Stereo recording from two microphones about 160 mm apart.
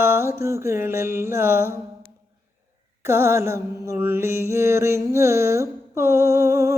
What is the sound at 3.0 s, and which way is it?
Mantra, 15° right (ahead or behind).